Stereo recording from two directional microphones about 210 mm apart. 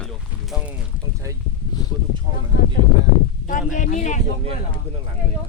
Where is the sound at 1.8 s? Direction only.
20° left (ahead or behind).